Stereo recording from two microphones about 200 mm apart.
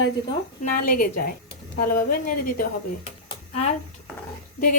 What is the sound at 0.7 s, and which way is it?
Speech, 45° left (ahead or behind).